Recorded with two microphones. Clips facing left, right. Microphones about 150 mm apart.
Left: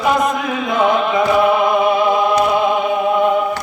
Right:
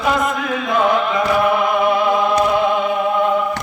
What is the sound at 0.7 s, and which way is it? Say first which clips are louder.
Music: left 1 dB; 20° left (ahead or behind).